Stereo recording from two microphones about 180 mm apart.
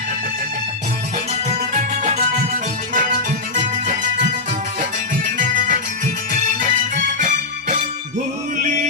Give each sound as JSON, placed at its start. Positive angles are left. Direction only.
{"t": 1.5, "sound": "music", "side_deg": -40}
{"t": 4.8, "sound": "music", "side_deg": -45}